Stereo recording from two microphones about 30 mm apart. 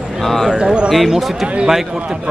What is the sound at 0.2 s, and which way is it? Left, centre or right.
Speech, centre.